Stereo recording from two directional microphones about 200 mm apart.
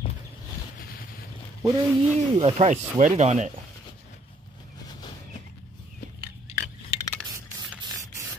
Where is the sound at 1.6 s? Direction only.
15° right (ahead or behind).